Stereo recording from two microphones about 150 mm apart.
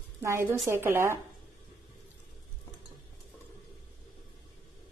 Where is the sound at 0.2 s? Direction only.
15° right (ahead or behind).